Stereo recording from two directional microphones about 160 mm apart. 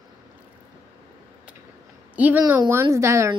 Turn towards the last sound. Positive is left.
turn(degrees=-15)  # may be behind; listen again after turning